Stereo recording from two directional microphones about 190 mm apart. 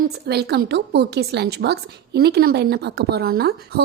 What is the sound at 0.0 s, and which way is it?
A woman's voice, 60° right (ahead or behind).